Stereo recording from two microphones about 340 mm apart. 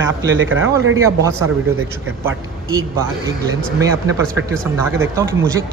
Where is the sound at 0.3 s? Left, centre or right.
Right.